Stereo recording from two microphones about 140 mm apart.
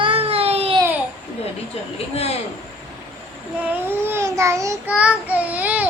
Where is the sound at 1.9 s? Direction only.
45° left (ahead or behind).